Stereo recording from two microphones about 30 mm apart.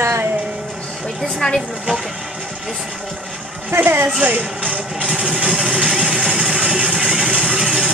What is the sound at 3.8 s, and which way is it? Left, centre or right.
Speech, right.